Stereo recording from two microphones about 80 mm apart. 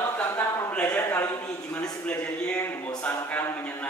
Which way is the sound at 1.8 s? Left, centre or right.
Centre.